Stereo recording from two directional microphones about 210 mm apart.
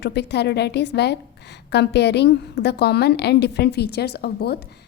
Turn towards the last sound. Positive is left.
turn(degrees=50)  # may be behind; listen again after turning